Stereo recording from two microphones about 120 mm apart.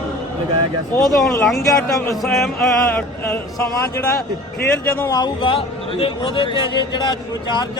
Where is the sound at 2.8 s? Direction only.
20° left (ahead or behind).